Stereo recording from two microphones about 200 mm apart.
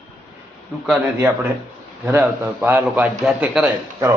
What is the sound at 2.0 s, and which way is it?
A man's voice, 10° right (ahead or behind).